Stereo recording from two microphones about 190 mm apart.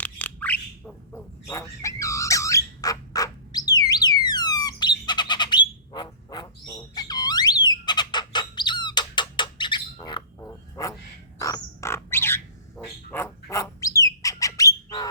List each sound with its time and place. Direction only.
0.0 s bird: 10° left (ahead or behind)